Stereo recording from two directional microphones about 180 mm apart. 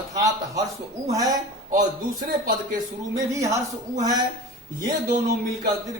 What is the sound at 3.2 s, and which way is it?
Speech, 15° right (ahead or behind).